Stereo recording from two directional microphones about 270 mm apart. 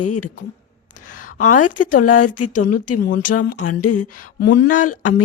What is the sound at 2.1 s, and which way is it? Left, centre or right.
Speech, left.